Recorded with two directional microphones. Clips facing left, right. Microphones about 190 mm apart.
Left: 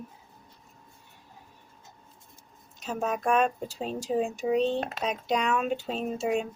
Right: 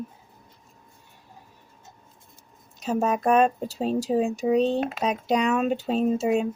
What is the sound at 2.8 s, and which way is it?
Speech, 40° right (ahead or behind).